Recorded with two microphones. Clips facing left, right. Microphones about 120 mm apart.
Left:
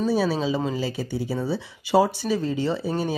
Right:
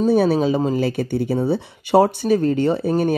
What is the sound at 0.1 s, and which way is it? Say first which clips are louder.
Speech: right 6 dB; 55° right (ahead or behind).